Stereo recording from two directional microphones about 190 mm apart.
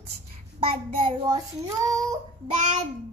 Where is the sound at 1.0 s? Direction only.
20° right (ahead or behind).